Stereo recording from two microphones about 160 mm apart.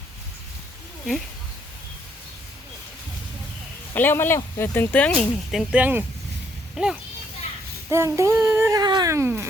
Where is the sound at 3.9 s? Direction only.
15° left (ahead or behind).